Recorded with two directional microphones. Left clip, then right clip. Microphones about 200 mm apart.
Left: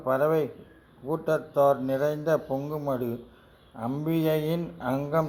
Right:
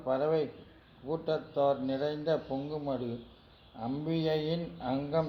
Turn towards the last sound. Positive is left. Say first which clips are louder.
# left 5 dB
turn(degrees=45)  # may be behind; listen again after turning